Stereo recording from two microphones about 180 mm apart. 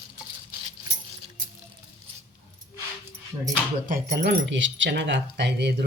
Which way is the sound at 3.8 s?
55° right (ahead or behind).